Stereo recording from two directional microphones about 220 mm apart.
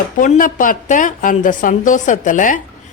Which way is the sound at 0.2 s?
40° left (ahead or behind).